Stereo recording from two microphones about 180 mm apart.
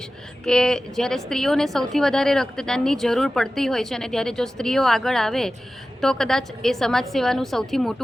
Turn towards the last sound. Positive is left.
turn(degrees=0)  # may be behind; listen again after turning